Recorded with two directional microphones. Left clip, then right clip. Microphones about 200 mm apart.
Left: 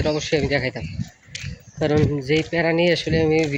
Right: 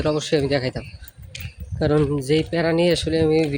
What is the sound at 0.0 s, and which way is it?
Speech, 20° right (ahead or behind).